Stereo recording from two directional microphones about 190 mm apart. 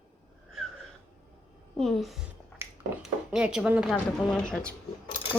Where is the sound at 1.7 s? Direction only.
Centre (ahead or behind).